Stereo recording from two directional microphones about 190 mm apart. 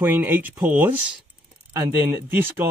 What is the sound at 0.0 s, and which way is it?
Speech, 10° right (ahead or behind).